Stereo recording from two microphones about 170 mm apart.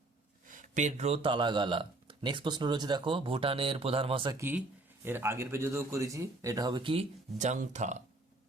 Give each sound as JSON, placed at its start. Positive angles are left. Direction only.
{"t": 0.4, "sound": "speech", "side_deg": -50}
{"t": 4.4, "sound": "speech", "side_deg": -10}
{"t": 7.3, "sound": "speech", "side_deg": -45}